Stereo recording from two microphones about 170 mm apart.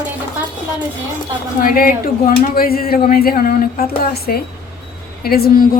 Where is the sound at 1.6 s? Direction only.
55° left (ahead or behind).